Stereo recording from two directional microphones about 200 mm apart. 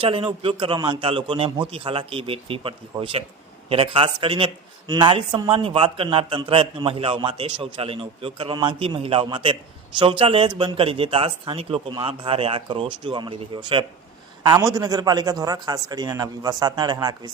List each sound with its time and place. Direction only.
0.0 s speech: 25° right (ahead or behind)